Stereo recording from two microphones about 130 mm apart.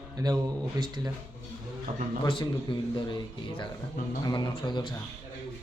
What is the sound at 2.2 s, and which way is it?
Speech, 40° left (ahead or behind).